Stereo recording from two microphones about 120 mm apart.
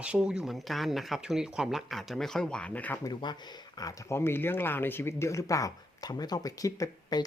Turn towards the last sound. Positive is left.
turn(degrees=30)  # may be behind; listen again after turning